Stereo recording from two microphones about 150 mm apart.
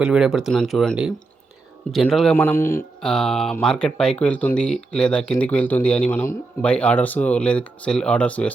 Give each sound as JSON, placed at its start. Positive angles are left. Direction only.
{"t": 0.0, "sound": "speech", "side_deg": -5}
{"t": 2.3, "sound": "speech", "side_deg": 15}
{"t": 3.0, "sound": "speech", "side_deg": 5}